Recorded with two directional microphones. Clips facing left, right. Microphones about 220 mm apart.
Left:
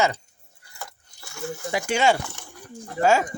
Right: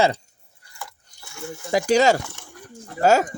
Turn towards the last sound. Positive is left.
turn(degrees=-40)  # may be behind; listen again after turning